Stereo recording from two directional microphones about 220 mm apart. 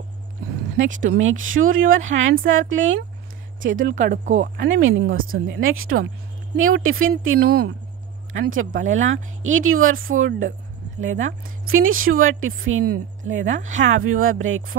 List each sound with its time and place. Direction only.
0.7 s speech: 60° right (ahead or behind)
3.6 s speech: 35° right (ahead or behind)
4.6 s speech: 60° right (ahead or behind)
5.1 s speech: 40° right (ahead or behind)
5.5 s speech: 65° right (ahead or behind)
8.3 s speech: 65° right (ahead or behind)